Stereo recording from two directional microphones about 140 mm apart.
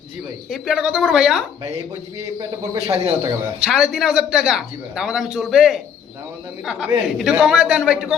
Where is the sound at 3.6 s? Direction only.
5° right (ahead or behind).